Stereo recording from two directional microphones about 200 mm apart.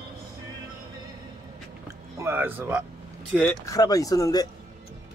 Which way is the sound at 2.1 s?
10° right (ahead or behind).